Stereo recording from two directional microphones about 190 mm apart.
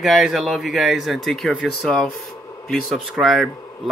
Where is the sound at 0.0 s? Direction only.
Centre (ahead or behind).